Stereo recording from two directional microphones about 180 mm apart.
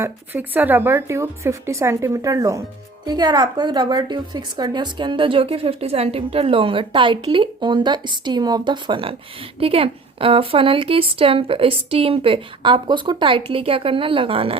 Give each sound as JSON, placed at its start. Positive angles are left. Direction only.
{"t": 0.0, "sound": "a woman's voice", "side_deg": -10}